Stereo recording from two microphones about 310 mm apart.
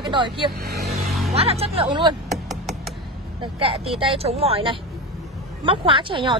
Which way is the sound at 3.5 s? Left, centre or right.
Centre.